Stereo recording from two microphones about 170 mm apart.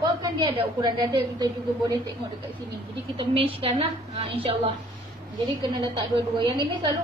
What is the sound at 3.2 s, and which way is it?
Speech, 35° right (ahead or behind).